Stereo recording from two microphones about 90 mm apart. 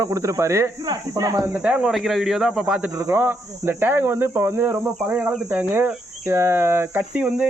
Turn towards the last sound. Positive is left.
turn(degrees=-15)  # may be behind; listen again after turning